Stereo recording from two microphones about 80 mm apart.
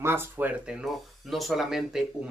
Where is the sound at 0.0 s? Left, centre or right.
Right.